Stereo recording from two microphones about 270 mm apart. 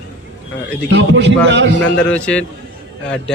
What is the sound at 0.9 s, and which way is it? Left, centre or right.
Speech, right.